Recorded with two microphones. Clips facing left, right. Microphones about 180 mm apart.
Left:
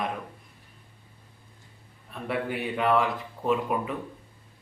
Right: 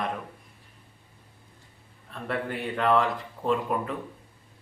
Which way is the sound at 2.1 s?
10° left (ahead or behind).